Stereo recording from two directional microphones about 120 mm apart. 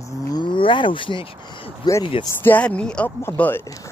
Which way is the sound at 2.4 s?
10° left (ahead or behind).